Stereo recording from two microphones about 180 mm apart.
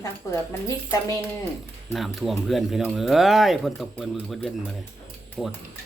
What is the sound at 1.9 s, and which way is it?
Speech, centre (ahead or behind).